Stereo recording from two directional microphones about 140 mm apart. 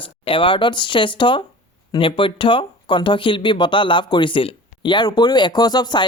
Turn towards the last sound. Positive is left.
turn(degrees=30)  # may be behind; listen again after turning